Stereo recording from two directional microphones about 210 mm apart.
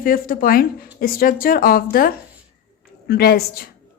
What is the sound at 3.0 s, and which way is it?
Speech, 50° left (ahead or behind).